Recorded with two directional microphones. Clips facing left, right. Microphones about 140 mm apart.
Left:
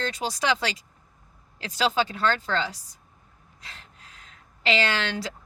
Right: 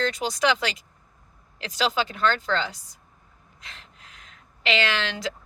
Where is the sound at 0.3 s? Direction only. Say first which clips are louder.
Right 1 dB; 35° left (ahead or behind).